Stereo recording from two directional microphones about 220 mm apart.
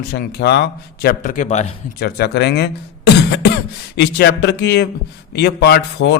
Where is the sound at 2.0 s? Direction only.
45° left (ahead or behind).